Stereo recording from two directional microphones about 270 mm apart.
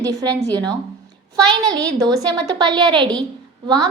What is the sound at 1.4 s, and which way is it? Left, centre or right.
A woman's voice, centre.